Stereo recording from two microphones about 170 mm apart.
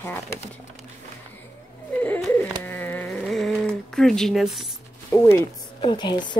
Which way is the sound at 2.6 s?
10° left (ahead or behind).